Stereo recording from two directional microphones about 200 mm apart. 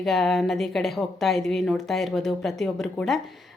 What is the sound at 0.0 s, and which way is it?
A woman's voice, centre (ahead or behind).